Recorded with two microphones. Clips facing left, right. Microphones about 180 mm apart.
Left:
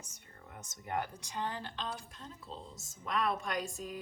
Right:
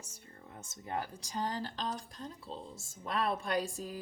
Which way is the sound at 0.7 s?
30° right (ahead or behind).